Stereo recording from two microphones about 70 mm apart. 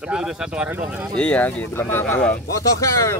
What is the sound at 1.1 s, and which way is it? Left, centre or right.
Speech, centre.